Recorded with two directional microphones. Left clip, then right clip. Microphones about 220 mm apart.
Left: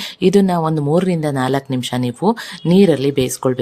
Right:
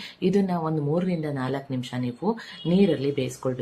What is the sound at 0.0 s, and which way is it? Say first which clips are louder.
Speech: left 10 dB; 50° left (ahead or behind).